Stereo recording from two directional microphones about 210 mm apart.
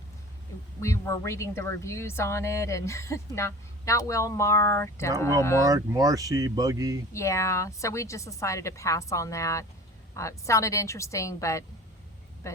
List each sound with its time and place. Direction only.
0.8 s a woman's voice: 15° left (ahead or behind)
5.5 s speech: 15° right (ahead or behind)
7.1 s a woman's voice: 15° left (ahead or behind)